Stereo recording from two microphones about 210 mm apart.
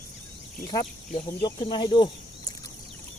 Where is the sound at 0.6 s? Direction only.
20° left (ahead or behind).